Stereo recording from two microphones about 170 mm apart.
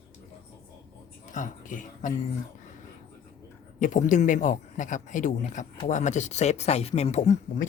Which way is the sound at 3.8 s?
50° left (ahead or behind).